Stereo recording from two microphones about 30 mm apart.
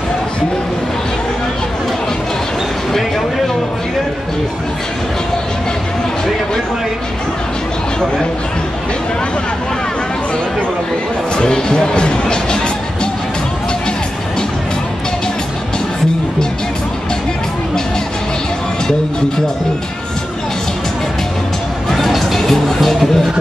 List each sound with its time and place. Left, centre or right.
11.3 s music: left
21.9 s music: centre